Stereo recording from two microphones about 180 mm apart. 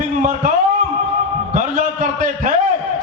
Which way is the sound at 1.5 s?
50° right (ahead or behind).